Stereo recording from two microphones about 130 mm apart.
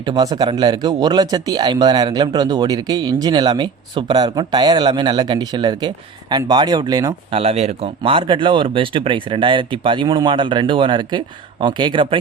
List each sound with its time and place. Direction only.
0.0 s speech: 35° right (ahead or behind)
7.3 s speech: 50° right (ahead or behind)